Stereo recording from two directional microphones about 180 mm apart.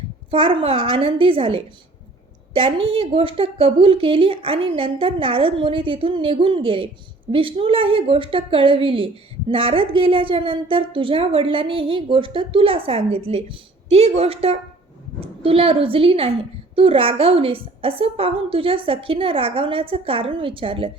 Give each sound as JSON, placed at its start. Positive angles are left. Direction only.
{"t": 0.3, "sound": "a woman's voice", "side_deg": -30}